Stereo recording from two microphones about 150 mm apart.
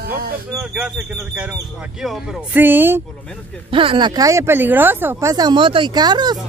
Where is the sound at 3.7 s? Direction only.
35° right (ahead or behind).